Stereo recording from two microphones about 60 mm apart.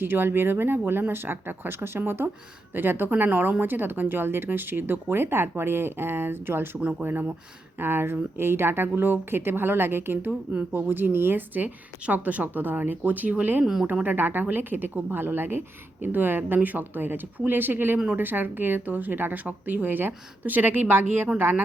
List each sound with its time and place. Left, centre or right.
0.0 s speech: right
10.5 s speech: right
10.8 s speech: right